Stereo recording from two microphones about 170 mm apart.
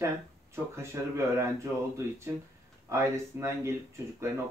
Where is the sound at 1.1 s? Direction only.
15° right (ahead or behind).